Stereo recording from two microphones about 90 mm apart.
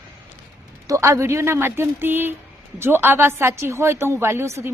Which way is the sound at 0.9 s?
35° right (ahead or behind).